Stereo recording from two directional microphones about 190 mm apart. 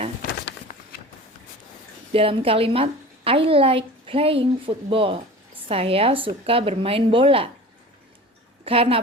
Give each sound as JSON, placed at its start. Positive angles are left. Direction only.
{"t": 0.2, "sound": "a sound", "side_deg": 50}
{"t": 2.1, "sound": "a woman's voice", "side_deg": -30}
{"t": 8.6, "sound": "a woman's voice", "side_deg": -30}